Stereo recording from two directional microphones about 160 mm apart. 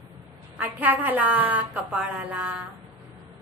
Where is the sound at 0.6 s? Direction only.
10° right (ahead or behind).